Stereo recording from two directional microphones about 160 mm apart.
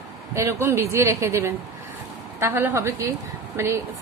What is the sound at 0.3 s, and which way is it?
A woman's voice, 15° right (ahead or behind).